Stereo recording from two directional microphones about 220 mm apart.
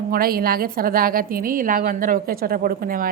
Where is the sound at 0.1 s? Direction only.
40° right (ahead or behind).